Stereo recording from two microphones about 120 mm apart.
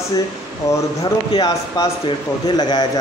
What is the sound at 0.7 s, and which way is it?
Speech, 25° left (ahead or behind).